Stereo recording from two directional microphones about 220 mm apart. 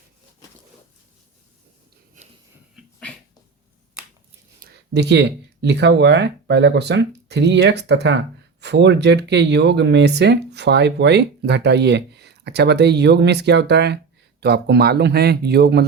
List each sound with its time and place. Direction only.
2.2 s wheeze: 35° right (ahead or behind)
4.6 s a sound: 50° right (ahead or behind)
5.6 s speech: 50° right (ahead or behind)